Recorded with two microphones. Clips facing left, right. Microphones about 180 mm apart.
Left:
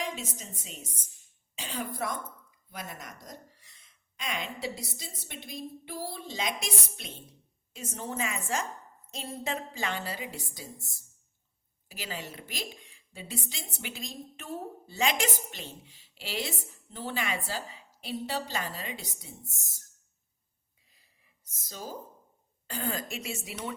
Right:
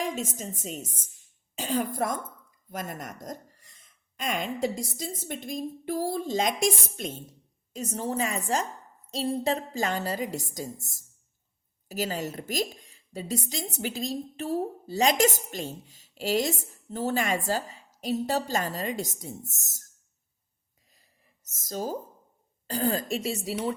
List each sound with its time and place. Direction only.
0.0 s a woman's voice: 45° right (ahead or behind)
20.9 s a sound: 45° right (ahead or behind)
22.6 s a woman's voice: 35° right (ahead or behind)